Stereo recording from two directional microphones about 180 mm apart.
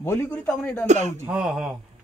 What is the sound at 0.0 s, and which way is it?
Speech, 15° left (ahead or behind).